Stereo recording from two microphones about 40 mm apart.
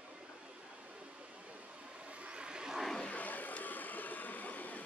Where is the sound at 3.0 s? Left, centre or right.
Left.